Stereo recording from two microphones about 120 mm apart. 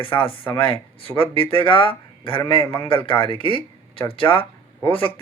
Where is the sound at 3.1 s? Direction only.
45° left (ahead or behind).